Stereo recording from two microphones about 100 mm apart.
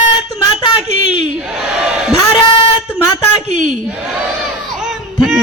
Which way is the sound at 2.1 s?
65° left (ahead or behind).